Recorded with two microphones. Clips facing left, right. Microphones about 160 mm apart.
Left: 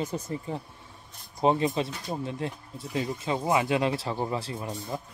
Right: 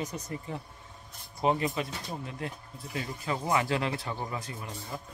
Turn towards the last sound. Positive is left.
turn(degrees=20)  # may be behind; listen again after turning